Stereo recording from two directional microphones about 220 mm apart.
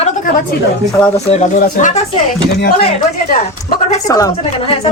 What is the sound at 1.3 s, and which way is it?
Speech, 35° left (ahead or behind).